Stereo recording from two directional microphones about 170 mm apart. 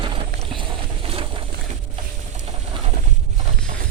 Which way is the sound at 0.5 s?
35° right (ahead or behind).